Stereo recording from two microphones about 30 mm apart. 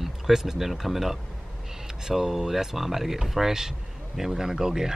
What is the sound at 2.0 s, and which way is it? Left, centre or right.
Speech, centre.